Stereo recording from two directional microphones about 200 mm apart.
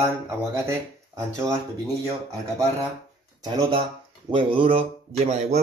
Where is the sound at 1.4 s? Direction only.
25° right (ahead or behind).